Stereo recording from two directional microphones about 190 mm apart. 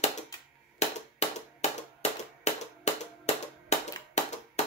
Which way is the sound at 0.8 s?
35° left (ahead or behind).